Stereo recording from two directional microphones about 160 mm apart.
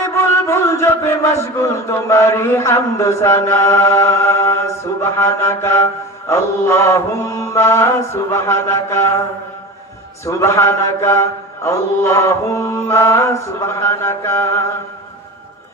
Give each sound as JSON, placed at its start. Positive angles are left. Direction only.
{"t": 0.0, "sound": "chant", "side_deg": 15}
{"t": 10.2, "sound": "chant", "side_deg": 15}